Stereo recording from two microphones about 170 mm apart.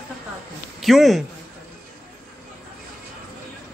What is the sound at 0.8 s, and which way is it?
Speech, centre (ahead or behind).